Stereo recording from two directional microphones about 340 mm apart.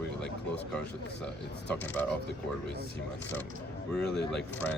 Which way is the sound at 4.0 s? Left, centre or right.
Centre.